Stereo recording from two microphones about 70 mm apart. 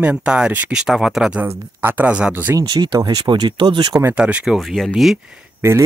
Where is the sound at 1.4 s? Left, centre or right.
Right.